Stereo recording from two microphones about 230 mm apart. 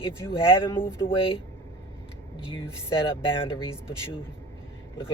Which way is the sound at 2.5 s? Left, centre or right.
Left.